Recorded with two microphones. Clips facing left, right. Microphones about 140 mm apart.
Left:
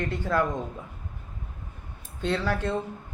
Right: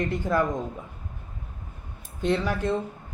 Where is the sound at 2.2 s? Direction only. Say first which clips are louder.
Right 2 dB; 15° right (ahead or behind).